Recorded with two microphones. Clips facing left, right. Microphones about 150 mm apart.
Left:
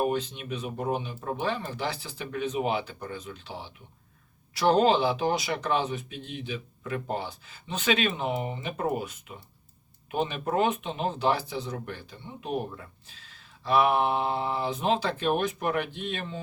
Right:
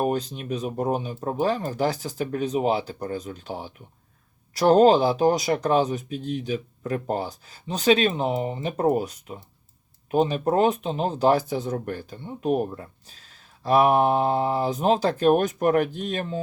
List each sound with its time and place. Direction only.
0.0 s speech: 40° right (ahead or behind)